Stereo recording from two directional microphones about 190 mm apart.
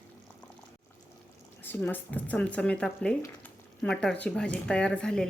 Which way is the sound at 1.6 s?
10° left (ahead or behind).